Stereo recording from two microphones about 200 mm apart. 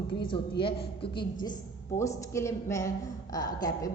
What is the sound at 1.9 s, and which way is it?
A woman's voice, 15° left (ahead or behind).